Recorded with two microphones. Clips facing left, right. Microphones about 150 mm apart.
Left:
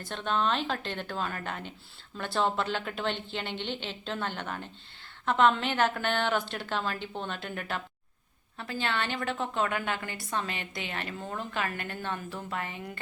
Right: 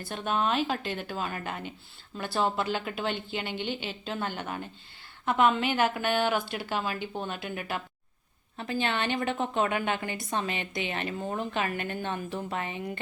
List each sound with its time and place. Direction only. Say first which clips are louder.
0.0 s a woman's voice: right 1 dB; 10° right (ahead or behind)
8.5 s a woman's voice: right 2 dB; 20° right (ahead or behind)